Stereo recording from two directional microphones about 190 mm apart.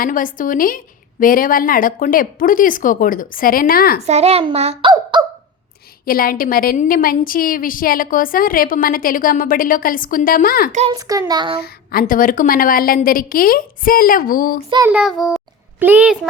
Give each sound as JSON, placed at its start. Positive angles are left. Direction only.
{"t": 0.0, "sound": "a woman's voice", "side_deg": 45}
{"t": 4.0, "sound": "a child's voice", "side_deg": -35}
{"t": 6.1, "sound": "a woman's voice", "side_deg": 50}
{"t": 10.7, "sound": "a child's voice", "side_deg": -35}
{"t": 10.9, "sound": "a child's voice", "side_deg": -20}
{"t": 11.6, "sound": "a woman's voice", "side_deg": 50}
{"t": 14.9, "sound": "a child's voice", "side_deg": 0}